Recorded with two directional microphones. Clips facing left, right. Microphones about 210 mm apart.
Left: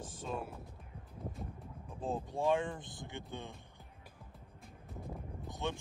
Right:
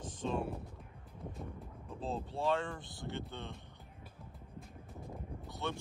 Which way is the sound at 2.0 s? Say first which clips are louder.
Left 2 dB; 15° left (ahead or behind).